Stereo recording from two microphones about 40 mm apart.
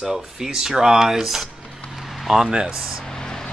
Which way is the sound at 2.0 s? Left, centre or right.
Centre.